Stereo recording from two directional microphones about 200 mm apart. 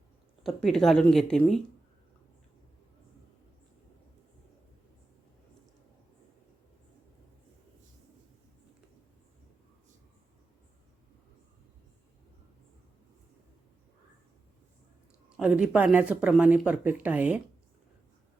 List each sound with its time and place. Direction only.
0.4 s speech: centre (ahead or behind)
15.4 s speech: 5° right (ahead or behind)